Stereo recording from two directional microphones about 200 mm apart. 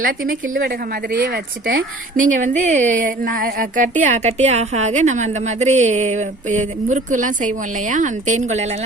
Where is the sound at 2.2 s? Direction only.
40° right (ahead or behind).